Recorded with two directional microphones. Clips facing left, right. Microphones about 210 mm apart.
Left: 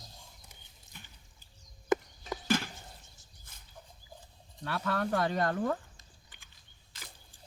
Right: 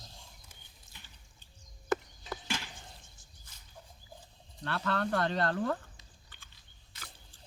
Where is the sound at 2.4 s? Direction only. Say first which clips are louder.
Left 11 dB; 50° left (ahead or behind).